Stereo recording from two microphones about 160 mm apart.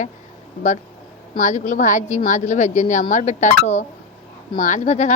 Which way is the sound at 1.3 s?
50° left (ahead or behind).